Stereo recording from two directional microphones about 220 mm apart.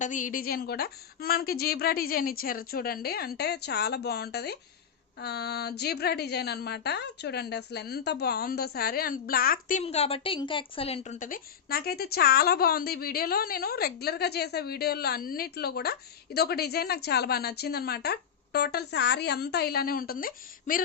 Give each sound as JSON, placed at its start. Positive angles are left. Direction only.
{"t": 0.0, "sound": "a woman's voice", "side_deg": 35}
{"t": 9.8, "sound": "a woman's voice", "side_deg": 25}